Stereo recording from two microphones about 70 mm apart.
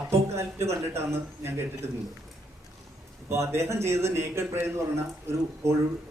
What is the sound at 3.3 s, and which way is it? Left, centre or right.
A man's voice, right.